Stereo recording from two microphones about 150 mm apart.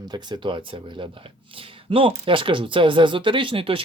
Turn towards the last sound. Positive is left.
turn(degrees=-35)  # may be behind; listen again after turning